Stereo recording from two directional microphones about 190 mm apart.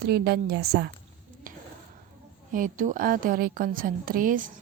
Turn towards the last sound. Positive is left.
turn(degrees=-45)  # may be behind; listen again after turning